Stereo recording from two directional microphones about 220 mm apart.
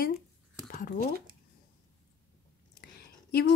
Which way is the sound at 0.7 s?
40° left (ahead or behind).